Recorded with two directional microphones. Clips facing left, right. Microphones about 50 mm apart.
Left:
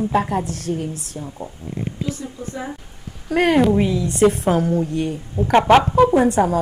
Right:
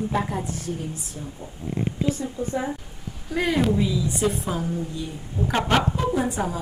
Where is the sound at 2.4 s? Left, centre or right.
Right.